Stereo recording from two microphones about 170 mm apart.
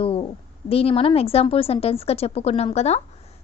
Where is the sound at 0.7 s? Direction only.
35° left (ahead or behind).